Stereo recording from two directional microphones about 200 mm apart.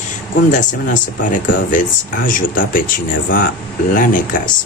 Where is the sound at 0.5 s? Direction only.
40° left (ahead or behind).